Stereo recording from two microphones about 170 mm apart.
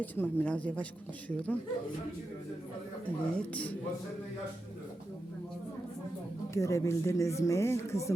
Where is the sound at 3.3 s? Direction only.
10° left (ahead or behind).